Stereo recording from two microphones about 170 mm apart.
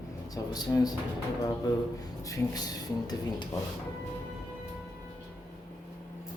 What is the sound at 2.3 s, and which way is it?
Speech, 20° left (ahead or behind).